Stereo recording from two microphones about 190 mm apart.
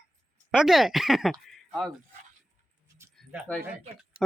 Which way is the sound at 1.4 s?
Centre (ahead or behind).